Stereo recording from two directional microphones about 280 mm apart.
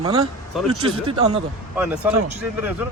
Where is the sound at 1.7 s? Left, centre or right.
Centre.